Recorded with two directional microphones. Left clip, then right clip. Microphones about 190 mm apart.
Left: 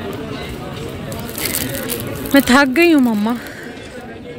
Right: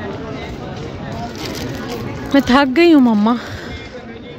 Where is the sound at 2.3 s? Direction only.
5° right (ahead or behind).